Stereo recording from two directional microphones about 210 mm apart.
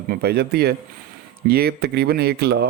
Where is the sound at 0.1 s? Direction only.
50° right (ahead or behind).